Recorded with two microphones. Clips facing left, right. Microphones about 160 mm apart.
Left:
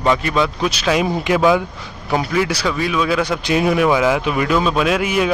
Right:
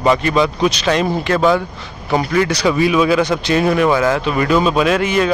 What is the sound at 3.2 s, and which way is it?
A man's voice, 10° left (ahead or behind).